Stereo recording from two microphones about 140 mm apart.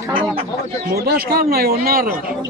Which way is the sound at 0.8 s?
90° right.